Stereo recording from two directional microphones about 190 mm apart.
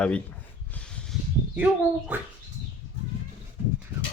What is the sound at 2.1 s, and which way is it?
Speech, 10° right (ahead or behind).